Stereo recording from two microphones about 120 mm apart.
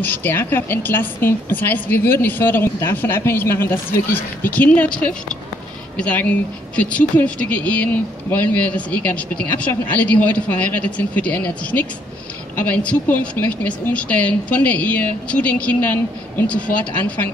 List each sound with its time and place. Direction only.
0.0 s a woman's voice: 15° left (ahead or behind)